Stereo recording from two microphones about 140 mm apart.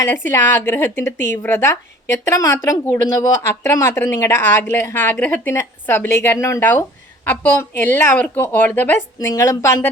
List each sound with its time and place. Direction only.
0.0 s speech: 15° left (ahead or behind)